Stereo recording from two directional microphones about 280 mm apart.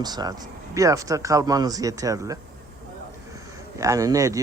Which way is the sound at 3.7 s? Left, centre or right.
Centre.